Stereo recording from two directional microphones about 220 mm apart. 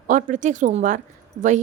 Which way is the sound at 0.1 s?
35° right (ahead or behind).